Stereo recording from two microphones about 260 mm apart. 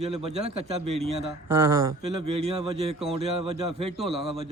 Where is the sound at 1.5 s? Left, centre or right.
Centre.